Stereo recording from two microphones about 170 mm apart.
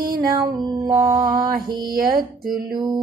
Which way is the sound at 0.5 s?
25° right (ahead or behind).